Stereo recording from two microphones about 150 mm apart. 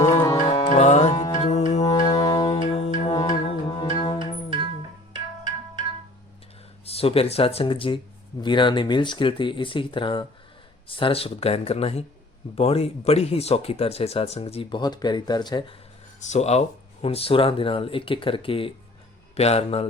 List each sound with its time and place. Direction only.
0.0 s music: 20° left (ahead or behind)
0.5 s music: 40° left (ahead or behind)
1.1 s music: 25° left (ahead or behind)
1.4 s music: 45° left (ahead or behind)
2.1 s music: 25° left (ahead or behind)
2.7 s music: 40° left (ahead or behind)
4.2 s music: 30° right (ahead or behind)
6.8 s speech: 40° left (ahead or behind)
16.3 s a man's voice: 50° left (ahead or behind)